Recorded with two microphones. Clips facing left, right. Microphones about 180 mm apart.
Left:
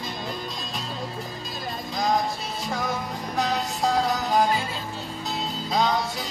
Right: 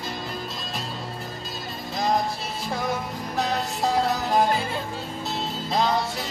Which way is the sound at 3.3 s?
Centre (ahead or behind).